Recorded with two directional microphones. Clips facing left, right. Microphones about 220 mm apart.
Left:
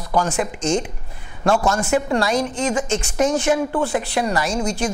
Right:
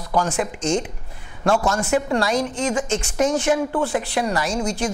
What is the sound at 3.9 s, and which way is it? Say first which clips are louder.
Chopping: left 1 dB; 15° left (ahead or behind).